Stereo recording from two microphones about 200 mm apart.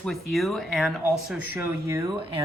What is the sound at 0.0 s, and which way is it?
Speech, centre (ahead or behind).